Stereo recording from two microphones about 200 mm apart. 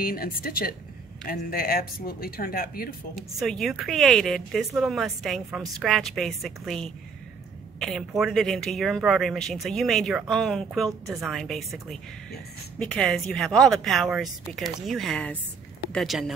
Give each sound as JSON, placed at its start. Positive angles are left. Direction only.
{"t": 0.0, "sound": "speech", "side_deg": 45}
{"t": 3.2, "sound": "speech", "side_deg": 0}